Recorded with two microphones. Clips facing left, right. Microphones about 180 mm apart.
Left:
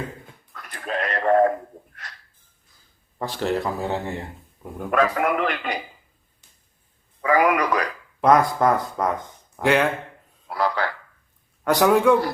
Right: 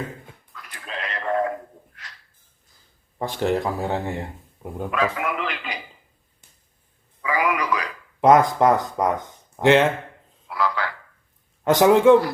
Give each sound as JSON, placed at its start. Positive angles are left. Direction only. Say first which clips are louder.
{"t": 0.5, "sound": "a sound", "louder": "left 7 dB", "side_deg": 50}
{"t": 3.2, "sound": "speech", "louder": "right 2 dB", "side_deg": -15}
{"t": 4.9, "sound": "speech", "louder": "left 4 dB", "side_deg": 45}
{"t": 7.2, "sound": "speech", "louder": "left 4 dB", "side_deg": 50}
{"t": 8.2, "sound": "speech", "louder": "right 2 dB", "side_deg": -20}
{"t": 10.5, "sound": "a sound", "louder": "left 1 dB", "side_deg": 45}
{"t": 11.6, "sound": "speech", "louder": "right 3 dB", "side_deg": -20}